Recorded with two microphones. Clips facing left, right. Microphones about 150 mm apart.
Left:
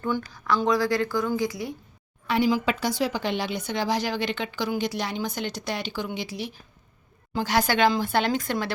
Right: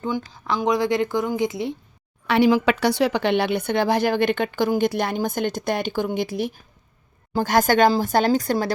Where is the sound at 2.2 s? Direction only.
70° right (ahead or behind).